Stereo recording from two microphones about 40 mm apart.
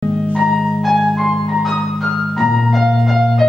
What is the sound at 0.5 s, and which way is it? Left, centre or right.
Music, centre.